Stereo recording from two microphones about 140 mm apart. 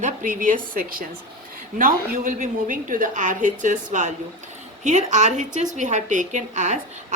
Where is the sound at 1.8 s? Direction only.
75° right (ahead or behind).